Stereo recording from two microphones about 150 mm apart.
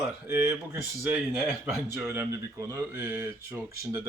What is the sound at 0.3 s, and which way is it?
Speech, 15° right (ahead or behind).